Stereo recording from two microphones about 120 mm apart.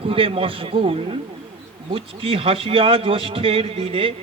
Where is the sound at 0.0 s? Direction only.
50° right (ahead or behind).